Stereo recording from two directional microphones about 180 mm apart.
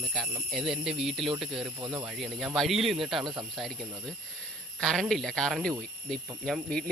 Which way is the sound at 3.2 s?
25° right (ahead or behind).